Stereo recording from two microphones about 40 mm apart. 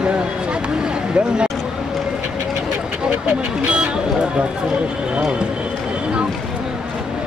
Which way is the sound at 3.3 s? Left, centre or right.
Right.